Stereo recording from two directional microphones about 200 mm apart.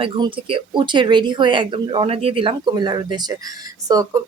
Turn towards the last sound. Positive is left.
turn(degrees=-20)  # may be behind; listen again after turning